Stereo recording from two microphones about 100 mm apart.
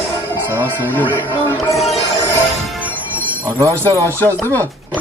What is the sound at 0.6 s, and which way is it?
Speech, 20° left (ahead or behind).